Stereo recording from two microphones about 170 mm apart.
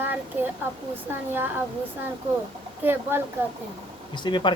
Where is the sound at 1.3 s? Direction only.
10° right (ahead or behind).